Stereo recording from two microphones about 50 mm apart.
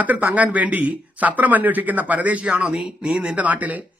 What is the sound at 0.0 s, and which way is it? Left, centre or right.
Speech, right.